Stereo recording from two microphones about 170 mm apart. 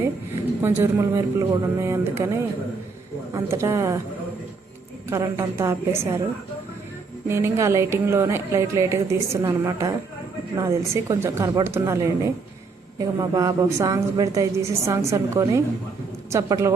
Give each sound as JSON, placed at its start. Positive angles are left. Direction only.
{"t": 0.6, "sound": "speech", "side_deg": -15}
{"t": 5.0, "sound": "speech", "side_deg": -15}
{"t": 7.3, "sound": "a woman's voice", "side_deg": -15}